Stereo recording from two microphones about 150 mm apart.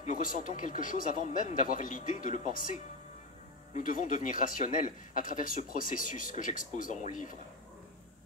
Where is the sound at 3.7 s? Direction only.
60° left (ahead or behind).